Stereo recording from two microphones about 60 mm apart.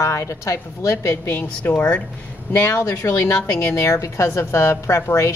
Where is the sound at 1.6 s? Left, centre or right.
Left.